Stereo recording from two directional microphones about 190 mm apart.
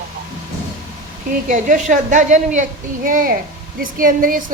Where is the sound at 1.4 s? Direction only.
40° right (ahead or behind).